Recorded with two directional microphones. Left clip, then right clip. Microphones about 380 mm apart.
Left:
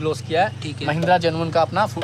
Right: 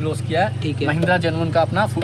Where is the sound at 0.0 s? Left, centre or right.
Centre.